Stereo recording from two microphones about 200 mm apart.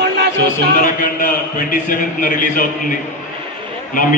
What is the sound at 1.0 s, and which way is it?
A man's voice, 45° left (ahead or behind).